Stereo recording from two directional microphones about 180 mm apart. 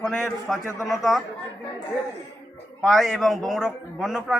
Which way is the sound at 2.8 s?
Centre (ahead or behind).